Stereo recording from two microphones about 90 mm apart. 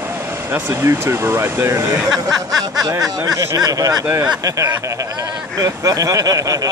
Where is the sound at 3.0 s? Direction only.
35° right (ahead or behind).